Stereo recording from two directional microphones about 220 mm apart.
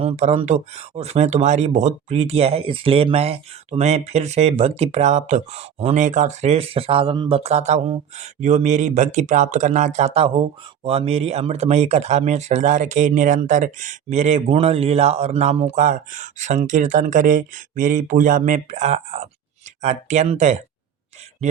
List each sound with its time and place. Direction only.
0.0 s speech: 30° right (ahead or behind)